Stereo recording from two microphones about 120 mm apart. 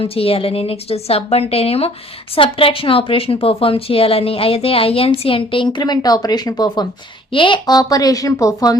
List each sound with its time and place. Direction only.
0.0 s a woman's voice: 50° left (ahead or behind); by 8.8 s 30° left (ahead or behind)